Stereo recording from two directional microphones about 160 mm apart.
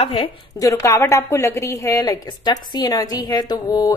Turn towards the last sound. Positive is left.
turn(degrees=25)  # may be behind; listen again after turning